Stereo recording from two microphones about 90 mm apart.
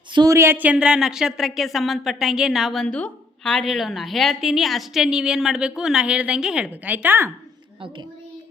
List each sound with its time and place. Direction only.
0.3 s speech: 30° right (ahead or behind)